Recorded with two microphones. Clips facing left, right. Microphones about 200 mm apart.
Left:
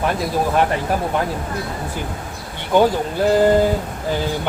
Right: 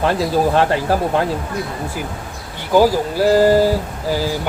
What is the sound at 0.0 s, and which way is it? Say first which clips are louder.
Speech: right 4 dB; 30° right (ahead or behind).